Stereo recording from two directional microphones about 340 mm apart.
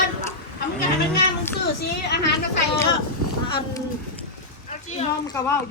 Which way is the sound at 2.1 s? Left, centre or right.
Left.